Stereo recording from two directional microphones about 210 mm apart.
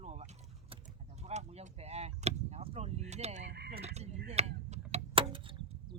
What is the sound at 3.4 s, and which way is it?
Speech, 50° right (ahead or behind).